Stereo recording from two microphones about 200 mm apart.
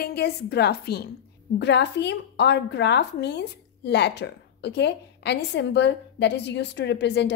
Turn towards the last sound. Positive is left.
turn(degrees=60)  # may be behind; listen again after turning